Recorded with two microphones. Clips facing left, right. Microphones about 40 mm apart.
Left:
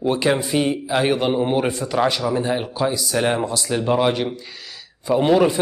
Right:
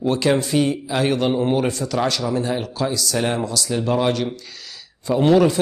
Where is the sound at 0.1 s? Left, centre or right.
Centre.